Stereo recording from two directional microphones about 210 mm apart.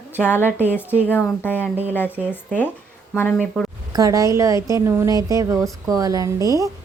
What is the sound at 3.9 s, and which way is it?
Speech, 15° right (ahead or behind).